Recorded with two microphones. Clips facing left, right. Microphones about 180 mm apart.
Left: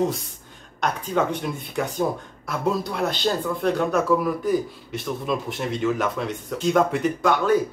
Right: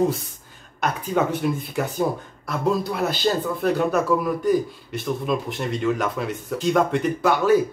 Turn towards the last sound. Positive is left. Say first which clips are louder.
# right 2 dB
turn(degrees=-5)  # may be behind; listen again after turning